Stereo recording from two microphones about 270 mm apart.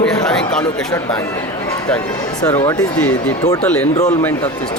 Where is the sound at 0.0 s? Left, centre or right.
Centre.